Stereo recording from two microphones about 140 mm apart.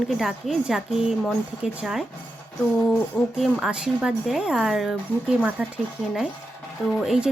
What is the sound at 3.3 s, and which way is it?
A woman's voice, 5° right (ahead or behind).